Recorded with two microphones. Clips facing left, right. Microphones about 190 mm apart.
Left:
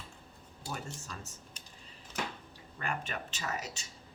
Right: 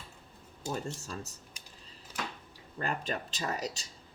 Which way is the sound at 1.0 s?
35° right (ahead or behind).